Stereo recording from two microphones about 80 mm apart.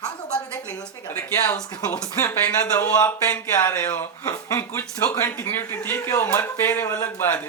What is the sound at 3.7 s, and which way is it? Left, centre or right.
Speech, left.